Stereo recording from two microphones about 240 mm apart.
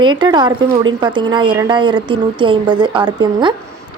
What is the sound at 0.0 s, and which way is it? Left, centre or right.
A woman's voice, centre.